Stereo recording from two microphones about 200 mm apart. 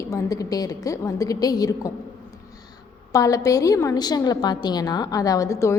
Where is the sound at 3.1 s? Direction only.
15° left (ahead or behind).